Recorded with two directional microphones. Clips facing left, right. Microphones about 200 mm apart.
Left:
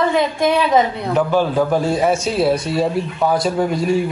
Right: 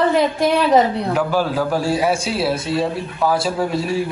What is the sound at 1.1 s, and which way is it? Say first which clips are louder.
A man's voice: left 5 dB; 5° right (ahead or behind).